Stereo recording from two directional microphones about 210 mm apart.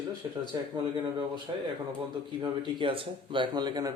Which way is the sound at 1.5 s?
20° right (ahead or behind).